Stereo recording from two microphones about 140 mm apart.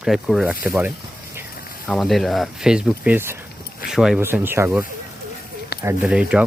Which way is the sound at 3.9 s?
5° right (ahead or behind).